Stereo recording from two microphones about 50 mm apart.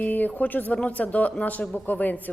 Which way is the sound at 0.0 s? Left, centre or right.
Left.